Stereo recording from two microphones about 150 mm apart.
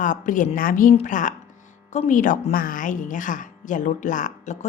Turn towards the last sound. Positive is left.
turn(degrees=55)  # may be behind; listen again after turning